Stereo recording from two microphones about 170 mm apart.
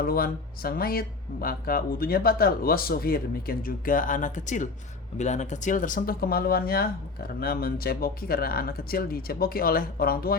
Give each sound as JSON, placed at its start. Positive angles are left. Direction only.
{"t": 0.0, "sound": "speech", "side_deg": 60}